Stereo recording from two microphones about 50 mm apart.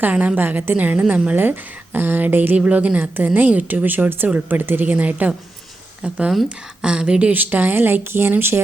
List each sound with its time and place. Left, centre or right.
0.0 s a woman's voice: right
1.4 s a woman's voice: right
2.6 s a woman's voice: right
6.0 s speech: right
7.3 s speech: right